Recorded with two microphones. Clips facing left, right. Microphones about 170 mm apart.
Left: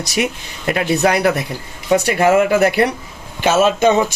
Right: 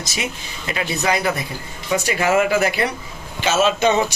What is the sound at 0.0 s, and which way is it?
Speech, 65° left (ahead or behind).